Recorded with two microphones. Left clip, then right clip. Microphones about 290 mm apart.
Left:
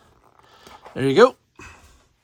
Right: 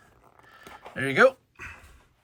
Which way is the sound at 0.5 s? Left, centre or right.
Centre.